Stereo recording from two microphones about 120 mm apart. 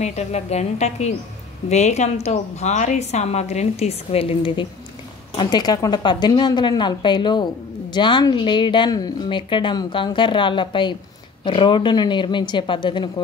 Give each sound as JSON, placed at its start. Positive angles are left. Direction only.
{"t": 0.0, "sound": "a woman's voice", "side_deg": 70}
{"t": 5.4, "sound": "speech", "side_deg": 35}